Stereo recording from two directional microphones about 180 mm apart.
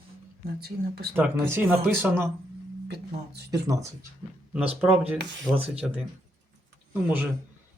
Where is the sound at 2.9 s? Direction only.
70° right (ahead or behind).